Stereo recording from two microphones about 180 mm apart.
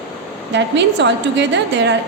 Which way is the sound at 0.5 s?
75° right (ahead or behind).